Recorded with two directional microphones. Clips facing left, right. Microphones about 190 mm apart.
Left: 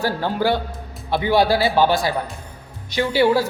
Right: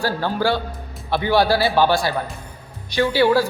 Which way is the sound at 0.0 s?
20° left (ahead or behind).